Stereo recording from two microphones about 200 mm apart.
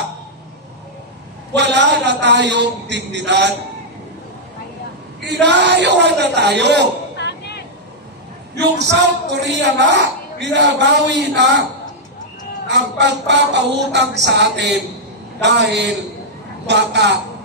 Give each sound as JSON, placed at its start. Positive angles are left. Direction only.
{"t": 1.5, "sound": "speech", "side_deg": -60}
{"t": 5.3, "sound": "speech", "side_deg": -60}
{"t": 7.2, "sound": "a sound", "side_deg": 55}
{"t": 8.9, "sound": "speech", "side_deg": -60}
{"t": 12.6, "sound": "speech", "side_deg": -60}